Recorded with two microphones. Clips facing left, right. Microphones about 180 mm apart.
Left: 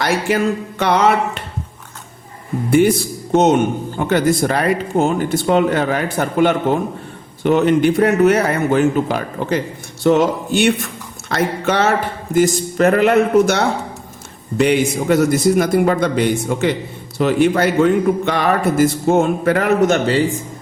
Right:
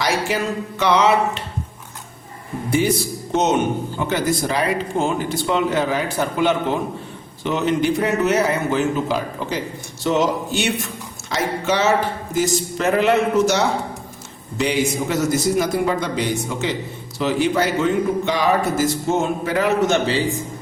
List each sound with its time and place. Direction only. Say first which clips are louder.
0.0 s speech: left 4 dB; 55° left (ahead or behind)
2.6 s speech: left 7 dB; 55° left (ahead or behind)
3.9 s speech: left 8 dB; 55° left (ahead or behind)